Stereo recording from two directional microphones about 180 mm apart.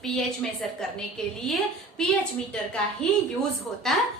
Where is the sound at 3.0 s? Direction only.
5° left (ahead or behind).